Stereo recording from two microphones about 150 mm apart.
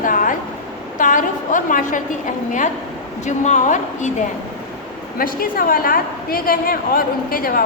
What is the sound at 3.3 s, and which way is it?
Speech, 55° left (ahead or behind).